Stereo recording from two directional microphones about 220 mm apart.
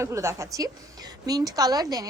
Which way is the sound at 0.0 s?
15° right (ahead or behind).